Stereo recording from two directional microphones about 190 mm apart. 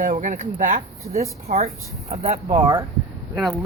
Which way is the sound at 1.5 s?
35° right (ahead or behind).